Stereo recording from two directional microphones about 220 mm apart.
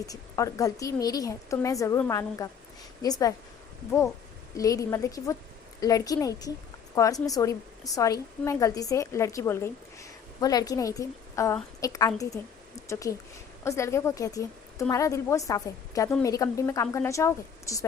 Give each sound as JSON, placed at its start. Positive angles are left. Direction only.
{"t": 0.0, "sound": "a woman's voice", "side_deg": 15}
{"t": 4.5, "sound": "a woman's voice", "side_deg": 15}